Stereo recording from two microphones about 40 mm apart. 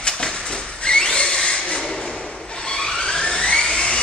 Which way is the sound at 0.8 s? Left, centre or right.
Left.